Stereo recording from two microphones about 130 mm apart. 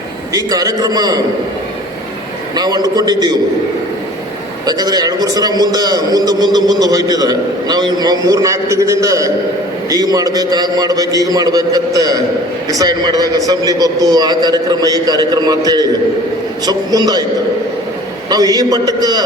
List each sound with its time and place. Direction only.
0.3 s a man's voice: 30° right (ahead or behind)
2.6 s a man's voice: 30° right (ahead or behind)
4.6 s a man's voice: 30° right (ahead or behind)
18.3 s a man's voice: 30° right (ahead or behind)